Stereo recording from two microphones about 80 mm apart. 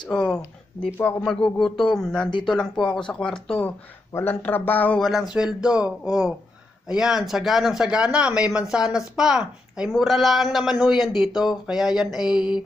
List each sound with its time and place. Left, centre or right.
0.1 s speech: centre
4.1 s speech: left
4.9 s speech: centre
5.3 s speech: centre